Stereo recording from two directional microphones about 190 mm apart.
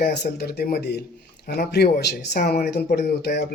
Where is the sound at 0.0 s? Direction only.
60° left (ahead or behind).